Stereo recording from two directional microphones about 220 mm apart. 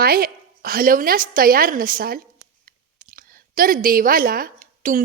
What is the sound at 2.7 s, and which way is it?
Clicking, 40° right (ahead or behind).